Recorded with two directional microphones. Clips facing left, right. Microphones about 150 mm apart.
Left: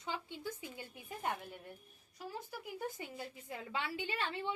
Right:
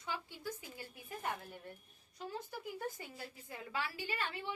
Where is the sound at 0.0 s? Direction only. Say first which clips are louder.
Left 1 dB; 20° left (ahead or behind).